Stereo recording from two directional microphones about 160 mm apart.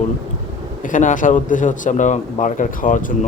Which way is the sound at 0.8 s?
55° left (ahead or behind).